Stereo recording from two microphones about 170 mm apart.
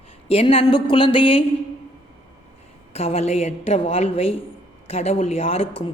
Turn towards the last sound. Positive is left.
turn(degrees=35)  # may be behind; listen again after turning